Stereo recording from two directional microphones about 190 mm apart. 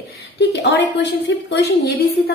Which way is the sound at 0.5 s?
65° left (ahead or behind).